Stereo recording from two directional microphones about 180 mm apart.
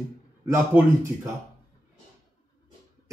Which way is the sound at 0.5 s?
15° right (ahead or behind).